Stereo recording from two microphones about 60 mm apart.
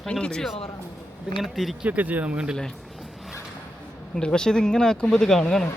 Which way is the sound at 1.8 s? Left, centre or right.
Right.